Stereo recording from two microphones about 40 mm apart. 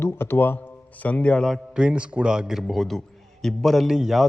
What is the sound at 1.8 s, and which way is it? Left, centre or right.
Speech, right.